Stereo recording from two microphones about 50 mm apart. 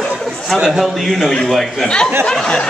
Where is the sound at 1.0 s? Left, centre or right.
Centre.